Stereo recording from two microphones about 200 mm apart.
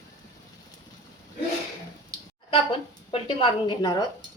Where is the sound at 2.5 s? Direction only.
25° left (ahead or behind).